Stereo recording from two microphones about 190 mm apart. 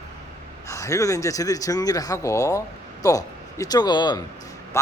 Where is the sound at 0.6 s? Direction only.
15° left (ahead or behind).